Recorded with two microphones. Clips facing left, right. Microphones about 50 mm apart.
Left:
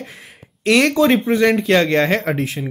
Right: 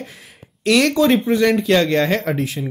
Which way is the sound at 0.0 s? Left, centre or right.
Left.